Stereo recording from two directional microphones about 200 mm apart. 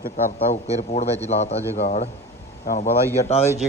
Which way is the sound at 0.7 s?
35° left (ahead or behind).